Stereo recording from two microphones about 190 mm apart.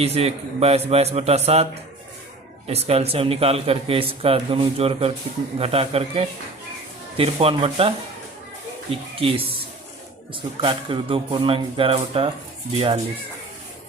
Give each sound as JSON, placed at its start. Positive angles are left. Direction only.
{"t": 0.0, "sound": "speech", "side_deg": -30}
{"t": 2.6, "sound": "speech", "side_deg": -35}
{"t": 10.6, "sound": "speech", "side_deg": -25}